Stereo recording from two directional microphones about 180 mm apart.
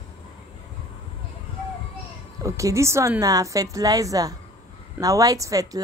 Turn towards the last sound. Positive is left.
turn(degrees=-20)  # may be behind; listen again after turning